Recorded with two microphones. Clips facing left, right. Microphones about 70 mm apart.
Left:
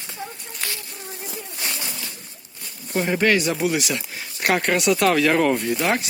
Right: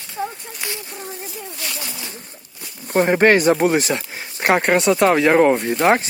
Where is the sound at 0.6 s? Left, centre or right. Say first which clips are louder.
Right 2 dB; right.